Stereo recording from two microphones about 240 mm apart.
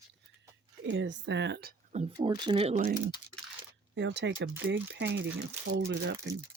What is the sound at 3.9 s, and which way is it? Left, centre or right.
Speech, right.